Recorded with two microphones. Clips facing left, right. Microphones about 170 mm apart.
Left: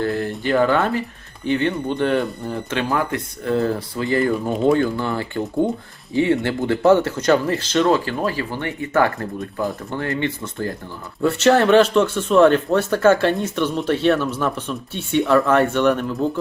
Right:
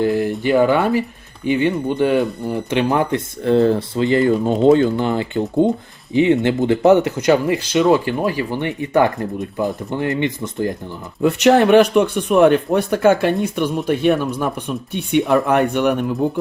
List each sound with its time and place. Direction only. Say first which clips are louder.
0.0 s speech: right 5 dB; 15° right (ahead or behind)
2.5 s speech: right 6 dB; 15° right (ahead or behind)